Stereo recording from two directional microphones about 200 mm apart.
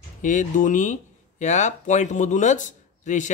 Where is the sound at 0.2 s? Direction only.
40° left (ahead or behind).